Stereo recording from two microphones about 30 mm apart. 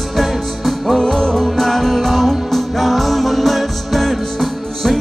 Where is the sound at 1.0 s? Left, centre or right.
Centre.